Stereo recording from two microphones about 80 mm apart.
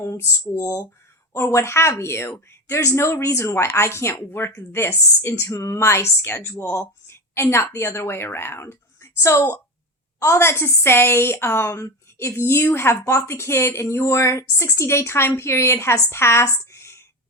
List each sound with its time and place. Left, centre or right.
1.3 s a woman's voice: left